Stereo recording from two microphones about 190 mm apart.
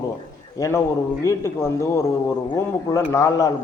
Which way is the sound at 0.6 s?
15° left (ahead or behind).